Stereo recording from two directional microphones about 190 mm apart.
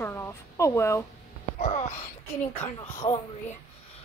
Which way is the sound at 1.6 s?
35° left (ahead or behind).